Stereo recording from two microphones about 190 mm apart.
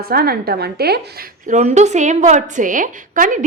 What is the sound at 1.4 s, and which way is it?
A woman's voice, 40° right (ahead or behind).